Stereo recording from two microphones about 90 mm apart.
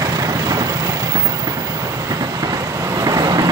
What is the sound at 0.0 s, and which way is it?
Vehicle, 45° right (ahead or behind).